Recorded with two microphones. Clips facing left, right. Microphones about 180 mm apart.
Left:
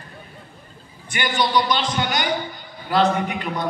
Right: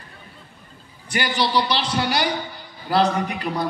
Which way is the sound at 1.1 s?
35° right (ahead or behind).